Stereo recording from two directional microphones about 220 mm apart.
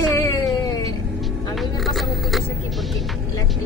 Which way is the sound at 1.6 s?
Centre (ahead or behind).